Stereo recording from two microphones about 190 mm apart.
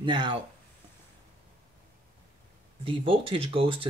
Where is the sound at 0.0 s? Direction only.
25° right (ahead or behind).